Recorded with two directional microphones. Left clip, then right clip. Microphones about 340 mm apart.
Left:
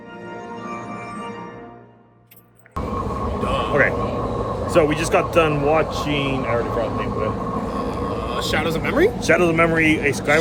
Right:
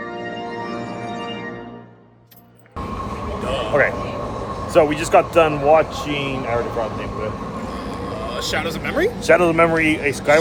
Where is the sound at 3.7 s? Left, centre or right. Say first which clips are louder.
Right 2 dB; centre.